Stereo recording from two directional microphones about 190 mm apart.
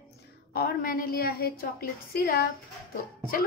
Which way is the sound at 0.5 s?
50° left (ahead or behind).